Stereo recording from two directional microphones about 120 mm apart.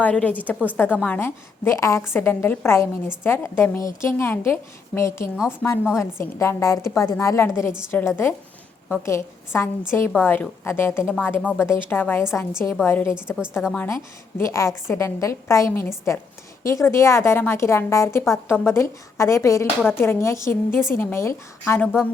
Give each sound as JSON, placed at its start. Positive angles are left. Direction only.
{"t": 0.0, "sound": "a woman's voice", "side_deg": 10}